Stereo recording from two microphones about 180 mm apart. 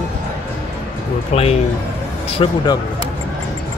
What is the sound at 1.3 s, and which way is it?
A man's voice, 35° left (ahead or behind).